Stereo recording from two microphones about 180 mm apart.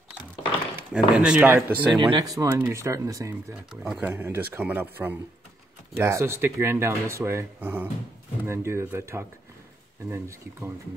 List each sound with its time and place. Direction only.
0.9 s speech: 5° right (ahead or behind)
1.9 s speech: 25° right (ahead or behind)
3.8 s speech: 5° right (ahead or behind)